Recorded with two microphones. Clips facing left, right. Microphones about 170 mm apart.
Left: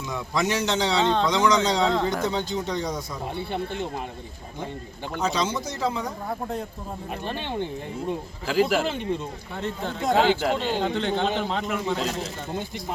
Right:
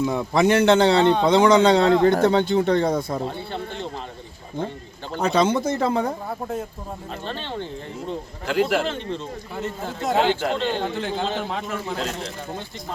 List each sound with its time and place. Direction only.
0.0 s a man's voice: 55° right (ahead or behind)
3.2 s speech: 15° left (ahead or behind)
5.2 s a man's voice: 55° right (ahead or behind)
7.3 s speech: 15° left (ahead or behind)
8.4 s a man's voice: centre (ahead or behind)
9.6 s a man's voice: 5° right (ahead or behind)
10.9 s a man's voice: 5° right (ahead or behind)